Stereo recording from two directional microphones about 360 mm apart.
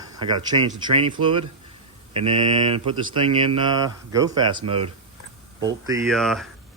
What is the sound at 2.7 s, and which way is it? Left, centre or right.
Speech, centre.